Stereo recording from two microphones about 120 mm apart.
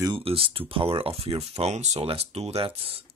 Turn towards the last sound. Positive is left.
turn(degrees=-50)  # may be behind; listen again after turning